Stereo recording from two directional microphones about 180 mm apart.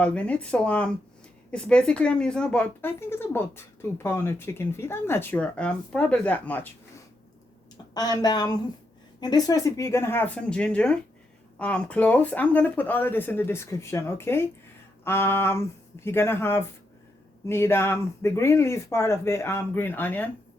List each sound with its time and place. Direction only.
0.0 s a woman's voice: 5° left (ahead or behind)
7.9 s a woman's voice: 20° left (ahead or behind)